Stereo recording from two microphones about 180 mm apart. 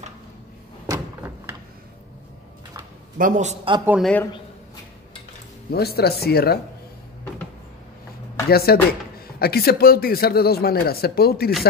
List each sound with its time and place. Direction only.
0.8 s door: 15° right (ahead or behind)
3.2 s a man's voice: 45° right (ahead or behind)
4.0 s a man's voice: 10° left (ahead or behind)
5.7 s speech: 60° left (ahead or behind)
8.5 s speech: 60° left (ahead or behind)